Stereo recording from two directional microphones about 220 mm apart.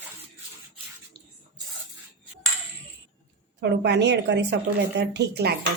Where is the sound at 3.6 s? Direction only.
50° right (ahead or behind).